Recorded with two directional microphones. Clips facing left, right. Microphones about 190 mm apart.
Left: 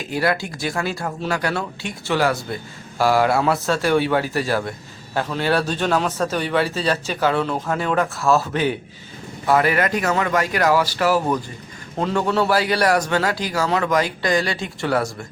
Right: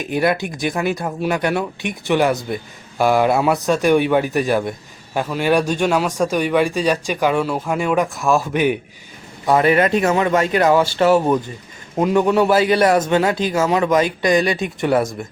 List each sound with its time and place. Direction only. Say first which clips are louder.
0.0 s a man's voice: right 3 dB; 20° right (ahead or behind)